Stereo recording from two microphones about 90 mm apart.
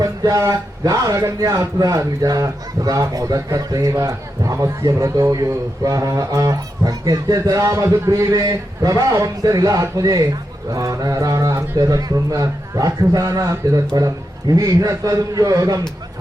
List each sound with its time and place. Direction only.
0.0 s speech: 40° right (ahead or behind)